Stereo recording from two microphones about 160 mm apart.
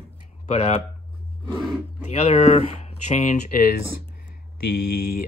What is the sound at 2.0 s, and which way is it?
Speech, 40° left (ahead or behind).